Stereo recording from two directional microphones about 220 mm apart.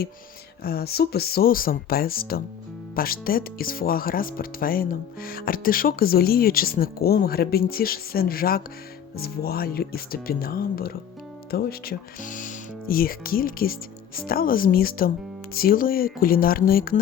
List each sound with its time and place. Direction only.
0.6 s speech: 45° left (ahead or behind)